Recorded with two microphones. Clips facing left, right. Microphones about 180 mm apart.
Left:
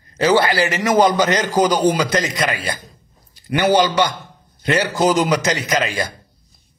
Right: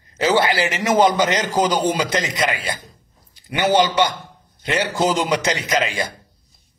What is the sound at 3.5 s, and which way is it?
A man's voice, 25° right (ahead or behind).